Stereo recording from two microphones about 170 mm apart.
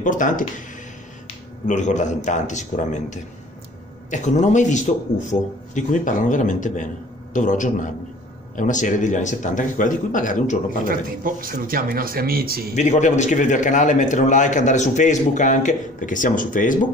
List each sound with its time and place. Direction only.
0.0 s a man's voice: 50° left (ahead or behind)
10.9 s speech: 55° right (ahead or behind)
12.7 s a man's voice: 45° left (ahead or behind)